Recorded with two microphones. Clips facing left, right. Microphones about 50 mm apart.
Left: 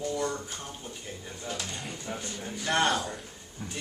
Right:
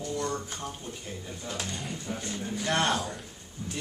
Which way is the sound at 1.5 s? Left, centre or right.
Centre.